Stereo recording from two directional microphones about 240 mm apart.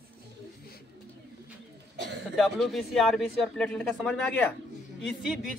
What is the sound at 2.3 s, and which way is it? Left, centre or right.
Speech, centre.